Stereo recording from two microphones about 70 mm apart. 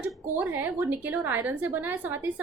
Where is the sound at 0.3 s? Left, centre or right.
Right.